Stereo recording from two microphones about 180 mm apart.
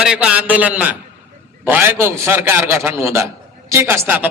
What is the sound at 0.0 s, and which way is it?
A man's voice, 5° right (ahead or behind).